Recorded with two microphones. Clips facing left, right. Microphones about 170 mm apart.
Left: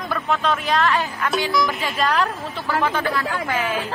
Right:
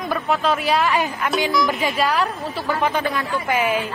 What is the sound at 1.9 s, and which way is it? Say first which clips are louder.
Speech: right 1 dB; 5° right (ahead or behind).